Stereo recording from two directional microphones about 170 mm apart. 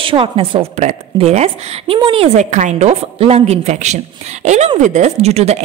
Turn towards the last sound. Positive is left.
turn(degrees=-40)  # may be behind; listen again after turning